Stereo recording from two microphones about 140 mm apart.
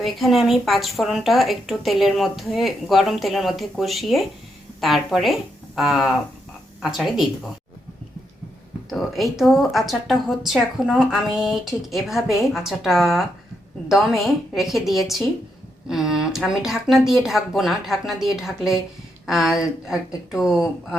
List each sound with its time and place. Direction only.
0.0 s a woman's voice: centre (ahead or behind)
8.9 s a woman's voice: centre (ahead or behind)